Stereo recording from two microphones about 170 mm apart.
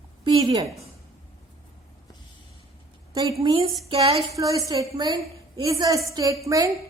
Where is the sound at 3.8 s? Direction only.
35° right (ahead or behind).